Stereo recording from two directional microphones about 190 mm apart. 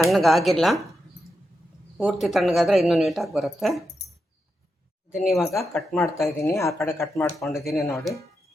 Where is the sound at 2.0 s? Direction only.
Centre (ahead or behind).